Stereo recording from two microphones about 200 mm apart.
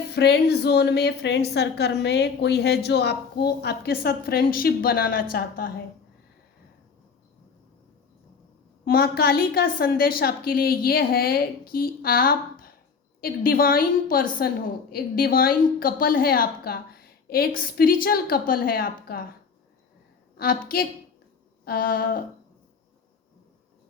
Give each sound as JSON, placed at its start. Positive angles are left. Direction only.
{"t": 0.1, "sound": "a woman's voice", "side_deg": 55}
{"t": 8.8, "sound": "a woman's voice", "side_deg": 50}
{"t": 20.3, "sound": "a woman's voice", "side_deg": 50}